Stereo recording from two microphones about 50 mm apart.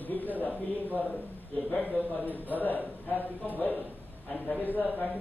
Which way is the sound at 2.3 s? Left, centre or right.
Left.